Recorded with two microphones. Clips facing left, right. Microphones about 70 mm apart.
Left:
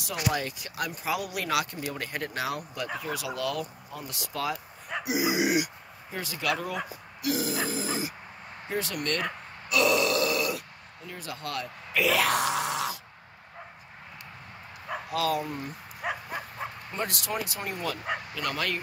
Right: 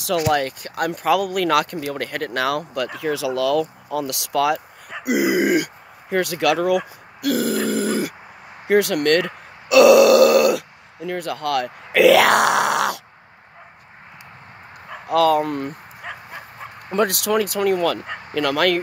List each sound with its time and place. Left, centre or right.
0.0 s speech: right
3.9 s speech: right
5.0 s a sound: right
6.0 s speech: right
7.2 s grunt: right
8.6 s speech: right
9.7 s grunt: right
15.0 s speech: right
16.0 s dog: centre
16.9 s speech: right
18.3 s speech: right